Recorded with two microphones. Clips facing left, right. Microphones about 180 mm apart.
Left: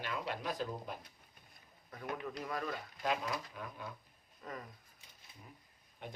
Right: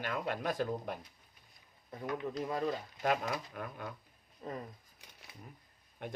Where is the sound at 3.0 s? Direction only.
55° right (ahead or behind).